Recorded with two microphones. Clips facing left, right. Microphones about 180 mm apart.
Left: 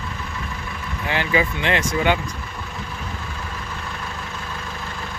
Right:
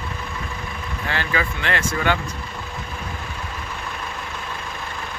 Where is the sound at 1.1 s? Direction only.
15° left (ahead or behind).